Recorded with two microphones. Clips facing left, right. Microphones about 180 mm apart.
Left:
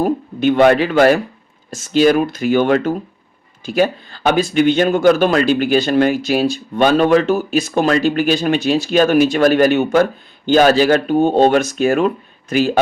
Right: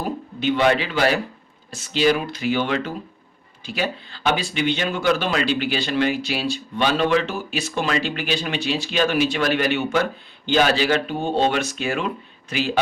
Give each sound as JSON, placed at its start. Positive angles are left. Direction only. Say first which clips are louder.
{"t": 0.0, "sound": "speech", "louder": "left 9 dB", "side_deg": 50}